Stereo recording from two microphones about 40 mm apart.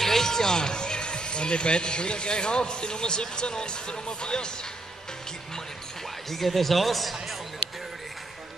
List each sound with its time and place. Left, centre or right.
0.0 s speech: centre
6.3 s speech: centre